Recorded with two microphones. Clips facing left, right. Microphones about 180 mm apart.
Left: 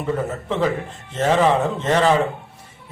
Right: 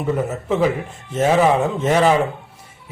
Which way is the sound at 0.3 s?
5° right (ahead or behind).